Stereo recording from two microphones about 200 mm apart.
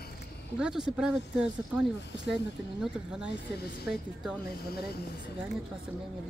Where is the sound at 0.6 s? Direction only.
Centre (ahead or behind).